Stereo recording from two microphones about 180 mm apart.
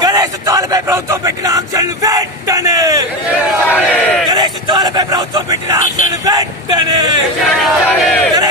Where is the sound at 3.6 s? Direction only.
10° left (ahead or behind).